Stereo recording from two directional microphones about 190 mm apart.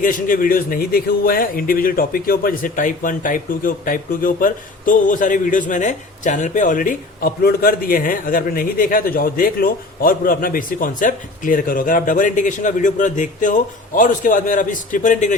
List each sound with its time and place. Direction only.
0.0 s speech: 45° left (ahead or behind)